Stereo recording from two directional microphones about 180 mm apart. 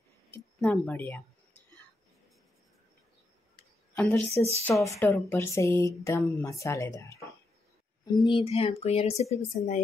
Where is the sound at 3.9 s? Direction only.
10° left (ahead or behind).